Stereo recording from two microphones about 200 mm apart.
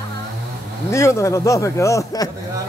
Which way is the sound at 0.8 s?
15° left (ahead or behind).